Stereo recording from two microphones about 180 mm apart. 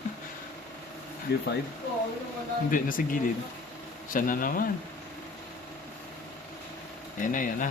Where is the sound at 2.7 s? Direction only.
50° left (ahead or behind).